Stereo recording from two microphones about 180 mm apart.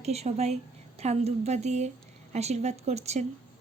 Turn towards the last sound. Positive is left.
turn(degrees=-35)  # may be behind; listen again after turning